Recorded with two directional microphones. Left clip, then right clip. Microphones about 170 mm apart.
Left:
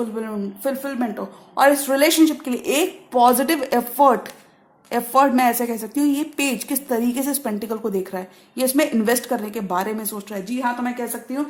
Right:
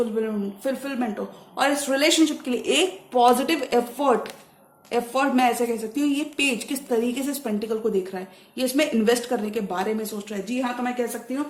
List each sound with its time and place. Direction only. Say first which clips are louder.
0.2 s a woman's voice: even; 45° left (ahead or behind)